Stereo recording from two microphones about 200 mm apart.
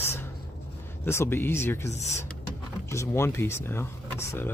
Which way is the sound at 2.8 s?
15° left (ahead or behind).